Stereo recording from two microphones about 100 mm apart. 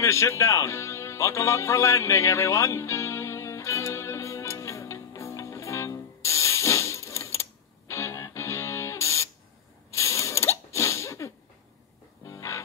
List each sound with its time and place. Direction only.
0.0 s music: 30° left (ahead or behind)
9.9 s ratchet: 30° left (ahead or behind)
12.3 s music: 30° left (ahead or behind)